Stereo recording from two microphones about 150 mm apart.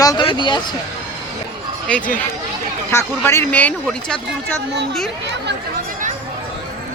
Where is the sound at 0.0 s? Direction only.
25° left (ahead or behind).